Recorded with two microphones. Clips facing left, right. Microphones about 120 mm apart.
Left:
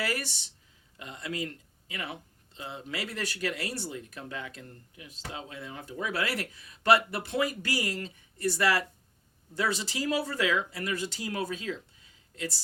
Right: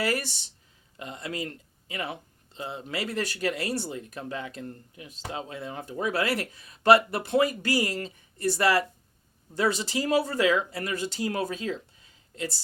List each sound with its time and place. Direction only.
0.0 s speech: 30° right (ahead or behind)